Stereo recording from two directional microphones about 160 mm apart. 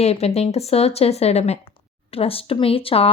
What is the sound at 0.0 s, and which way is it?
Speech, 40° left (ahead or behind).